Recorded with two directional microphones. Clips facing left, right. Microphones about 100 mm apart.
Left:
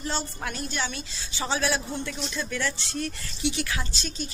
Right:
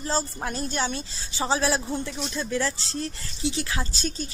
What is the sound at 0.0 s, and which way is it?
A woman's voice, 35° right (ahead or behind).